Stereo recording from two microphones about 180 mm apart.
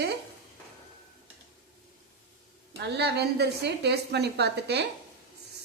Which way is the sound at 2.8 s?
65° right (ahead or behind).